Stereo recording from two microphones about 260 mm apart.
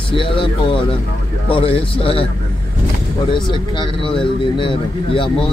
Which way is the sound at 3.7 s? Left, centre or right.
Centre.